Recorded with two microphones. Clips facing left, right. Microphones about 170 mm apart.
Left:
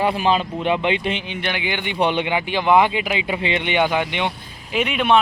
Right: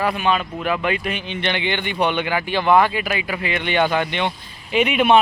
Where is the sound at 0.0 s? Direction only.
30° left (ahead or behind).